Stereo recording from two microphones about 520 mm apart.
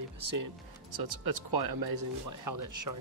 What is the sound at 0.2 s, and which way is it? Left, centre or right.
Speech, right.